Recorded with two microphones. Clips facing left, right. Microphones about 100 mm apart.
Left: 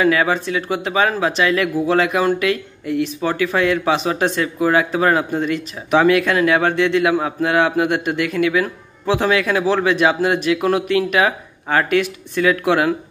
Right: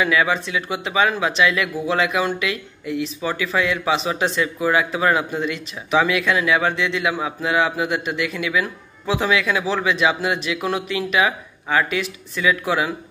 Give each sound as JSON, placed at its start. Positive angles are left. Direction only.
{"t": 0.0, "sound": "speech", "side_deg": 40}